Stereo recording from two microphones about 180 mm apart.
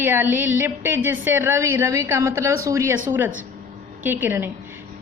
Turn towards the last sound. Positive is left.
turn(degrees=-10)  # may be behind; listen again after turning